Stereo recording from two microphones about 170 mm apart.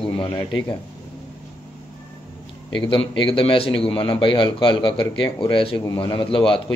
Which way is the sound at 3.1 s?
30° left (ahead or behind).